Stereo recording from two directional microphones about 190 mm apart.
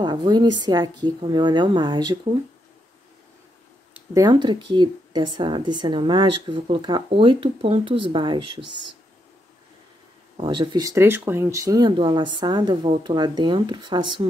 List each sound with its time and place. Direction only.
0.0 s speech: 20° right (ahead or behind)
3.9 s speech: 15° right (ahead or behind)
10.3 s speech: 25° right (ahead or behind)